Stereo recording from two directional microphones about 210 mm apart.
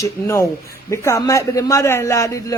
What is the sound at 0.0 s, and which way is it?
Speech, 15° left (ahead or behind).